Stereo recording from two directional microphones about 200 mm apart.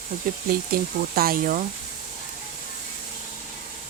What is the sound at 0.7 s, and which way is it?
Speech, 45° right (ahead or behind).